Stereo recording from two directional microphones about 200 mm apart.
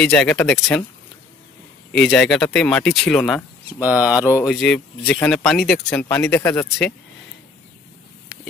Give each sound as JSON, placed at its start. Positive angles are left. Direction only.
{"t": 0.0, "sound": "speech", "side_deg": 5}
{"t": 1.9, "sound": "speech", "side_deg": 5}
{"t": 3.8, "sound": "speech", "side_deg": -10}
{"t": 4.5, "sound": "speech", "side_deg": 5}